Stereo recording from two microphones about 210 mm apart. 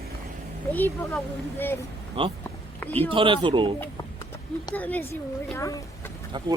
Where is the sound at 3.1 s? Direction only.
25° right (ahead or behind).